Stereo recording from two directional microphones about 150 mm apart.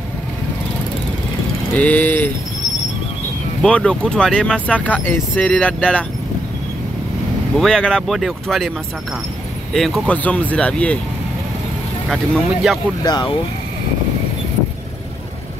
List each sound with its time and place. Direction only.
1.8 s speech: 10° left (ahead or behind)
3.6 s speech: 5° left (ahead or behind)
7.5 s speech: 5° left (ahead or behind)
9.8 s speech: centre (ahead or behind)
12.1 s speech: centre (ahead or behind)
13.0 s speech: 30° left (ahead or behind)